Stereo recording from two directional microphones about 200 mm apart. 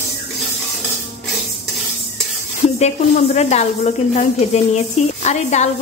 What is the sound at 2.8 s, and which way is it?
A woman's voice, 35° left (ahead or behind).